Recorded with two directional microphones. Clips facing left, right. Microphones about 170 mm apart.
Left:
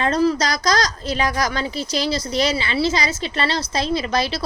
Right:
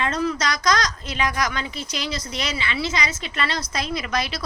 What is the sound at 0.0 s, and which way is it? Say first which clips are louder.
A woman's voice: left 5 dB; 35° left (ahead or behind).